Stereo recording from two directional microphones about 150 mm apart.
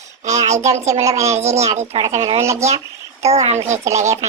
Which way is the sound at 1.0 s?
20° right (ahead or behind).